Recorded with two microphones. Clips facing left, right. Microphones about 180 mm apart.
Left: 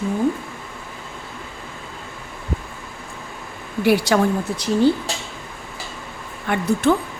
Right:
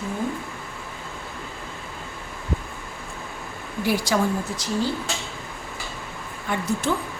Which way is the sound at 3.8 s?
65° left (ahead or behind).